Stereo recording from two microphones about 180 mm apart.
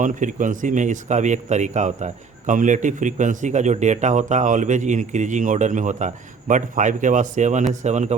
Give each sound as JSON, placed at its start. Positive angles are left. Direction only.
{"t": 0.0, "sound": "speech", "side_deg": -45}